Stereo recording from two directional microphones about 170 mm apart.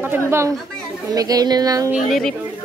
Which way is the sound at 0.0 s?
15° right (ahead or behind).